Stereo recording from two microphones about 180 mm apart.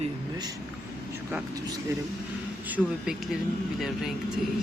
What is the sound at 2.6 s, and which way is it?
Speech, 10° right (ahead or behind).